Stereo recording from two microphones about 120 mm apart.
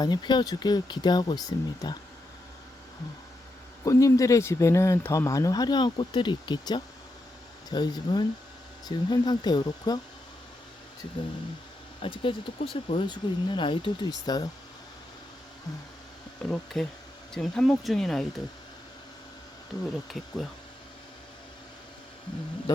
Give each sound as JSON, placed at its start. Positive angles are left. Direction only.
{"t": 0.0, "sound": "speech", "side_deg": 35}
{"t": 3.8, "sound": "speech", "side_deg": 25}
{"t": 12.0, "sound": "speech", "side_deg": 45}
{"t": 16.4, "sound": "speech", "side_deg": 5}
{"t": 19.8, "sound": "speech", "side_deg": 0}